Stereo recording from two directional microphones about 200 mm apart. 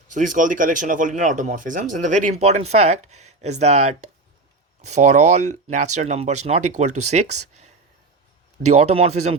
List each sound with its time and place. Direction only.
0.1 s speech: 40° right (ahead or behind)